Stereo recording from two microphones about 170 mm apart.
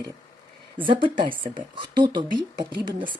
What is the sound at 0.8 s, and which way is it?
Speech, 30° right (ahead or behind).